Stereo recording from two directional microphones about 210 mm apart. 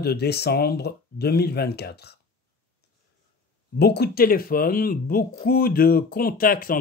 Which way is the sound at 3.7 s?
50° left (ahead or behind).